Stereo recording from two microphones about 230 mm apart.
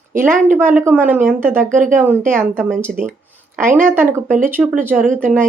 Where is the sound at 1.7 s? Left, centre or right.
Right.